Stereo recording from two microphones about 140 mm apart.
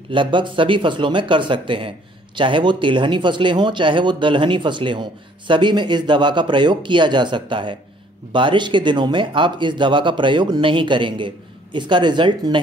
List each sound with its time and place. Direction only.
0.1 s speech: 35° right (ahead or behind)